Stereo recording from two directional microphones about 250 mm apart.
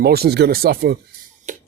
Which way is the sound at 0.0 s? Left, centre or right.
Right.